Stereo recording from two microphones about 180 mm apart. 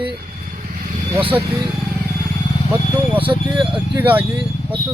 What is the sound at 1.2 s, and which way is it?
Speech, 30° right (ahead or behind).